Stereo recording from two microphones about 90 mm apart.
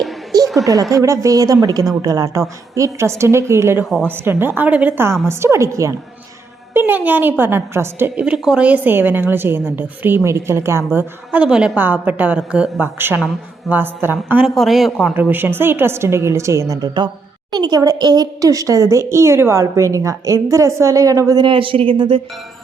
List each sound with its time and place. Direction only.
0.4 s a woman's voice: centre (ahead or behind)
0.7 s a woman's voice: 40° right (ahead or behind)
6.7 s a woman's voice: 20° right (ahead or behind)
8.2 s a woman's voice: 10° right (ahead or behind); by 10.8 s 30° right (ahead or behind)
10.9 s a woman's voice: 15° right (ahead or behind)
12.8 s a woman's voice: 25° right (ahead or behind)
14.4 s speech: centre (ahead or behind)
15.1 s a woman's voice: 20° right (ahead or behind); by 21.4 s 40° right (ahead or behind)
21.4 s speech: 75° right (ahead or behind)